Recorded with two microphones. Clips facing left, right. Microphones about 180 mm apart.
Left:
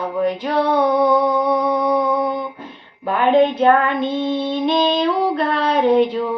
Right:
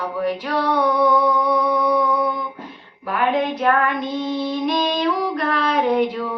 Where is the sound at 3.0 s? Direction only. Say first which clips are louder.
Left 6 dB; 25° left (ahead or behind).